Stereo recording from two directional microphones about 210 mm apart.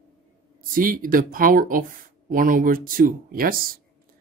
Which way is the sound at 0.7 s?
40° right (ahead or behind).